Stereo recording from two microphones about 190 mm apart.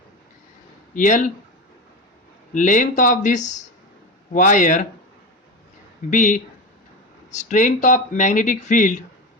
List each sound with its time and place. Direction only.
0.9 s speech: 45° left (ahead or behind)
2.5 s speech: 45° left (ahead or behind)
6.1 s speech: 40° left (ahead or behind)